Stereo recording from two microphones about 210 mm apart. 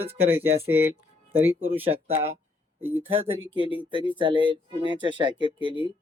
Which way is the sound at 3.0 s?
25° right (ahead or behind).